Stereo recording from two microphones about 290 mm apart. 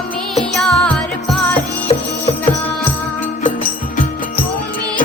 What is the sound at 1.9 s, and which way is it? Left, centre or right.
Music, left.